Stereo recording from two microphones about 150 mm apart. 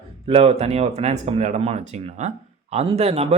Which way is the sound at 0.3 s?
45° right (ahead or behind).